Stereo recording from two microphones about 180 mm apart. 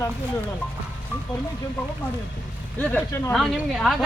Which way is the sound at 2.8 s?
10° left (ahead or behind).